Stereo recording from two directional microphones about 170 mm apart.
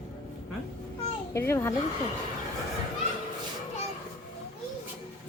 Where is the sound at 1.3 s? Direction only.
15° left (ahead or behind).